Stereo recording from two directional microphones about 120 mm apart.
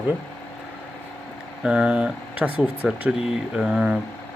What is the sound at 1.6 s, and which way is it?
Speech, 5° right (ahead or behind).